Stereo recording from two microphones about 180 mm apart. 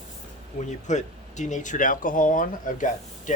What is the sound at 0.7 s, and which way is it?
Speech, 40° left (ahead or behind).